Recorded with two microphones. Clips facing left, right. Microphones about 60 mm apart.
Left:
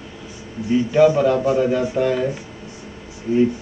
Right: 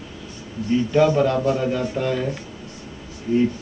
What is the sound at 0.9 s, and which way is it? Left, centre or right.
A man's voice, centre.